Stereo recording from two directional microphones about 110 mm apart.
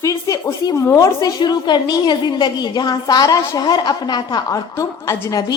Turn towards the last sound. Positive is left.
turn(degrees=30)  # may be behind; listen again after turning